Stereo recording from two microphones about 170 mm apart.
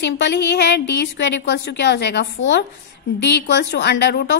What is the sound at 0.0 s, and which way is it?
A woman's voice, 90° left.